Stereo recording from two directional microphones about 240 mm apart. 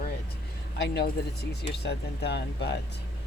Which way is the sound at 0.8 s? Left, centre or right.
Left.